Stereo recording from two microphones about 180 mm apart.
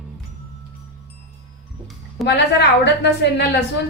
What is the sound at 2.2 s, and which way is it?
A woman's voice, 75° left (ahead or behind).